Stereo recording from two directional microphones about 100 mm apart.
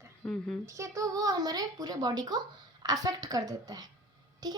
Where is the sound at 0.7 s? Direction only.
30° right (ahead or behind).